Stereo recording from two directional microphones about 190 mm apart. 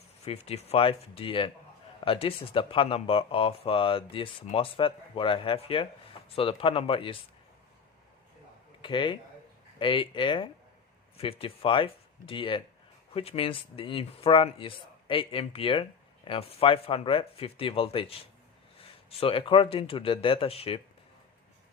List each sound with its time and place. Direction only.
0.3 s speech: 30° left (ahead or behind)
8.8 s speech: 25° left (ahead or behind)